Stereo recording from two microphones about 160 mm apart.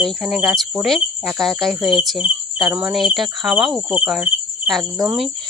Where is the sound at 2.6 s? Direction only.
10° right (ahead or behind).